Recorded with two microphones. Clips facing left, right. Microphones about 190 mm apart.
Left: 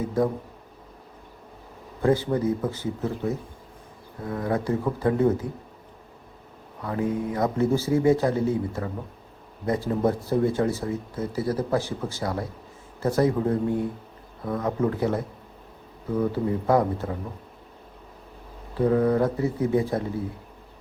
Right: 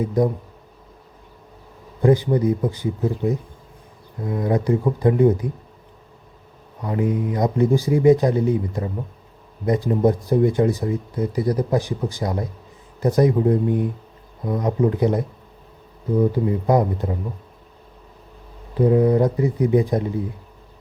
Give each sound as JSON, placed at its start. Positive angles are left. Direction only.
{"t": 0.0, "sound": "speech", "side_deg": -15}
{"t": 2.0, "sound": "speech", "side_deg": -15}
{"t": 6.8, "sound": "speech", "side_deg": -20}
{"t": 18.8, "sound": "speech", "side_deg": -15}